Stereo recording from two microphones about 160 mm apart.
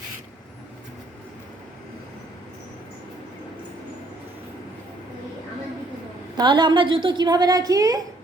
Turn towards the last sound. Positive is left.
turn(degrees=-25)  # may be behind; listen again after turning